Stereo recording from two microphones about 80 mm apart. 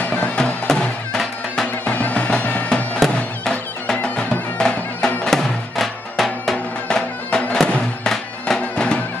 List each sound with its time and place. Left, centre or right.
0.0 s music: centre
1.9 s music: centre